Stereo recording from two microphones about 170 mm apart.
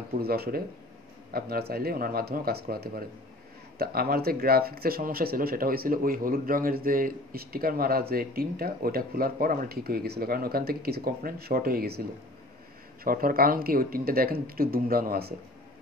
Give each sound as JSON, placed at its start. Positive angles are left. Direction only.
{"t": 0.2, "sound": "speech", "side_deg": -65}